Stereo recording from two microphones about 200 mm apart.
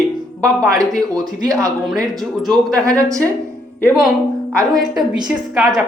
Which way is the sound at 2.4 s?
Centre (ahead or behind).